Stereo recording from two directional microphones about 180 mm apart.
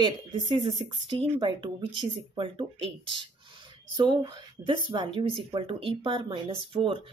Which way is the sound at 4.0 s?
25° right (ahead or behind).